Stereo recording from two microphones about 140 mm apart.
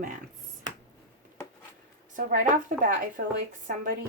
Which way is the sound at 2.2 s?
75° right (ahead or behind).